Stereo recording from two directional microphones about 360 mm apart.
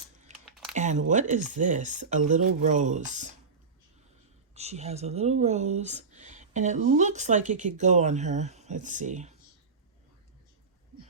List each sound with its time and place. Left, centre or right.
0.3 s a sound: centre
0.8 s speech: centre
4.5 s speech: centre